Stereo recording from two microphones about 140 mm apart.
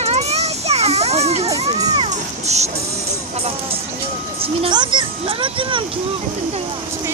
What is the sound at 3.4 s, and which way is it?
Speech, 45° right (ahead or behind).